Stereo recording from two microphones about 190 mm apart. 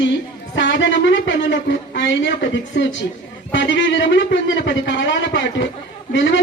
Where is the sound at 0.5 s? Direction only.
70° left (ahead or behind).